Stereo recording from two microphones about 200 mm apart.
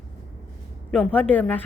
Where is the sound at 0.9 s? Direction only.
5° left (ahead or behind).